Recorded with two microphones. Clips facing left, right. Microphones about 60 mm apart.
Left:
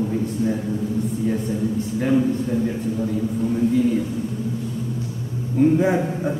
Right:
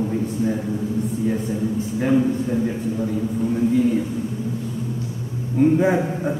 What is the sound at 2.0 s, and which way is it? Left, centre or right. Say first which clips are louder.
Speech: right 1 dB; centre.